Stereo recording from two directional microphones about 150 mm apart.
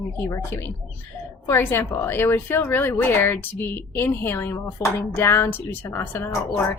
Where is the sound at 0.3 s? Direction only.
20° left (ahead or behind).